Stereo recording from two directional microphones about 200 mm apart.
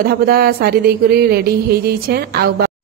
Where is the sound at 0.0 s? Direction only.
45° right (ahead or behind).